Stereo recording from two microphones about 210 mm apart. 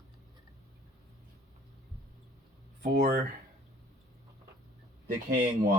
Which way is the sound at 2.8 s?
45° right (ahead or behind).